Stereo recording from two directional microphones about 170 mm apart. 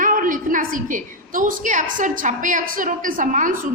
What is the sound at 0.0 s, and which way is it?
A woman's voice, 50° right (ahead or behind).